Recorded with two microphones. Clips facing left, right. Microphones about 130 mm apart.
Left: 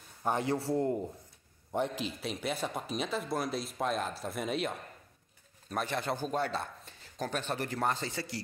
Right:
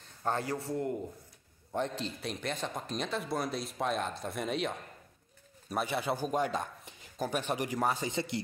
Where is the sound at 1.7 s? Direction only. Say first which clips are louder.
Left 1 dB; 10° left (ahead or behind).